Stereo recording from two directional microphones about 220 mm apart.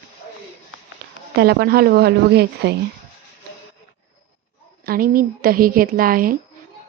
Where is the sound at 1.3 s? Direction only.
45° right (ahead or behind).